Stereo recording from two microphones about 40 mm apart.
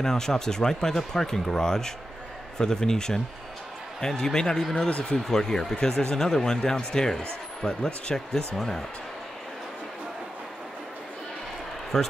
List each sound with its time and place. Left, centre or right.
0.0 s speech: centre
4.2 s speech: centre
4.8 s speech: left
5.1 s speech: centre
11.9 s speech: centre